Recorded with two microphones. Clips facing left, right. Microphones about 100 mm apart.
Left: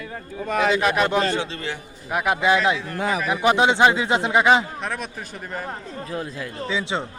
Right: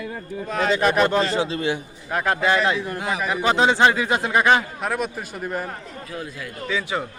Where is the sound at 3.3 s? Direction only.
15° left (ahead or behind).